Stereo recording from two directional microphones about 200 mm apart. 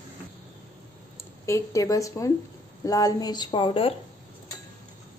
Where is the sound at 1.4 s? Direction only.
15° left (ahead or behind).